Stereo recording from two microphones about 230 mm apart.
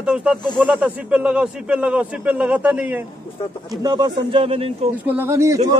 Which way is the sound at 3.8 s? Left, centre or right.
Centre.